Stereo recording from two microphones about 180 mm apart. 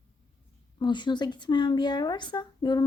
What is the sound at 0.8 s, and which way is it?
Speech, 25° left (ahead or behind).